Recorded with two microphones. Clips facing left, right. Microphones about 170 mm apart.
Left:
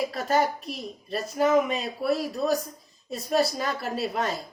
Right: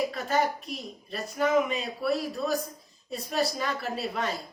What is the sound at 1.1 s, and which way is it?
A woman's voice, 40° left (ahead or behind).